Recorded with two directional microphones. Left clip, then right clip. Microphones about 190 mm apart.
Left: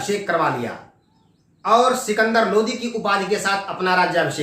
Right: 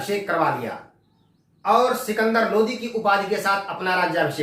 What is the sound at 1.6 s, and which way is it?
Speech, 20° left (ahead or behind).